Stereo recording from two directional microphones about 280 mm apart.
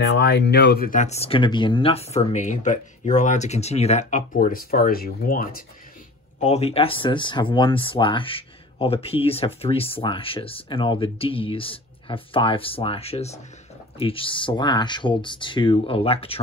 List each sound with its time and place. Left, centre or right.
0.0 s speech: left